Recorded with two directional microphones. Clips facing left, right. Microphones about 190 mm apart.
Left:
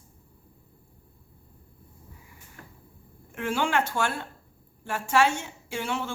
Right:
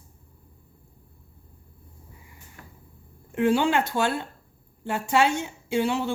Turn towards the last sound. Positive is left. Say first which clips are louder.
# right 7 dB
turn(degrees=-20)  # may be behind; listen again after turning